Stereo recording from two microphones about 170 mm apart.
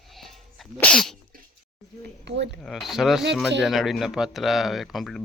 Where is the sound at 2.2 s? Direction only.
90° right.